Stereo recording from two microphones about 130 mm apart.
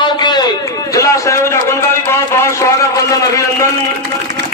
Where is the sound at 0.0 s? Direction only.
35° left (ahead or behind).